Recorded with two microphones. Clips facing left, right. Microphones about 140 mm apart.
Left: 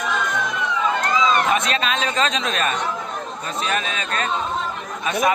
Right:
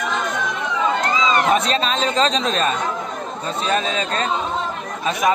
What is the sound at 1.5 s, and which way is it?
Speech, 35° right (ahead or behind).